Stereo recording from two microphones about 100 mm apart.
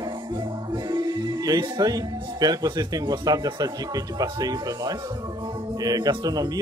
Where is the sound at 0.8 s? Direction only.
40° right (ahead or behind).